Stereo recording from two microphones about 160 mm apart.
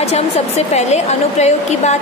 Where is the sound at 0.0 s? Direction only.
45° left (ahead or behind).